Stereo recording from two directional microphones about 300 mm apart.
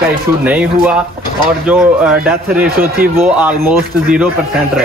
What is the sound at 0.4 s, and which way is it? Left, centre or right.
A man's voice, centre.